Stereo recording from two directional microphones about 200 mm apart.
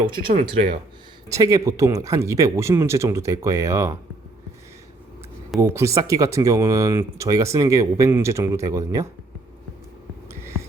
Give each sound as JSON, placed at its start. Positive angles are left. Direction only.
{"t": 0.0, "sound": "speech", "side_deg": -25}
{"t": 1.3, "sound": "speech", "side_deg": -15}
{"t": 5.5, "sound": "speech", "side_deg": -15}